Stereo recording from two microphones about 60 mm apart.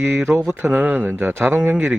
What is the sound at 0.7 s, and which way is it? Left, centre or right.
Speech, right.